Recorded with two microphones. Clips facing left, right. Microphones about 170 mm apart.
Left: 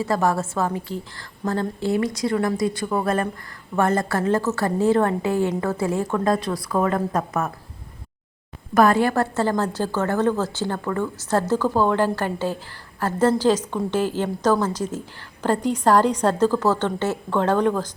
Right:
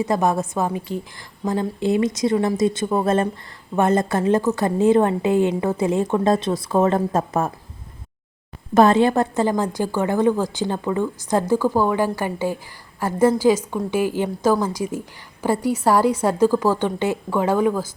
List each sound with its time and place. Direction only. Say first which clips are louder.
0.0 s a woman's voice: right 2 dB; 20° right (ahead or behind)
8.7 s a woman's voice: right 3 dB; 25° right (ahead or behind); by 17.8 s 5° right (ahead or behind)